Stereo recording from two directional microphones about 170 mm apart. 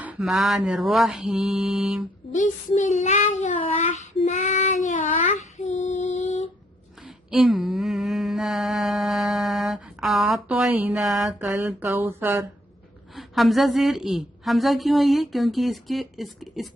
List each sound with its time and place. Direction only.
0.0 s a woman's voice: 5° right (ahead or behind)
2.3 s child singing: 45° left (ahead or behind)
7.0 s a sound: 5° right (ahead or behind)
13.1 s a woman's voice: centre (ahead or behind)